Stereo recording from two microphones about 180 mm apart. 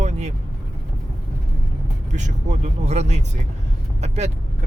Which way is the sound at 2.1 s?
40° right (ahead or behind).